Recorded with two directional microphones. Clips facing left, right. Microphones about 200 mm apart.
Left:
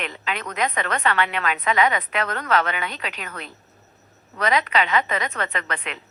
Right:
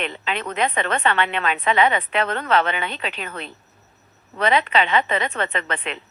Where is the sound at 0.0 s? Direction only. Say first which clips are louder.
Right 3 dB; 25° right (ahead or behind).